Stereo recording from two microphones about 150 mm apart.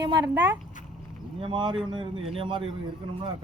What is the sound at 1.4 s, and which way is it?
Speech, 35° right (ahead or behind).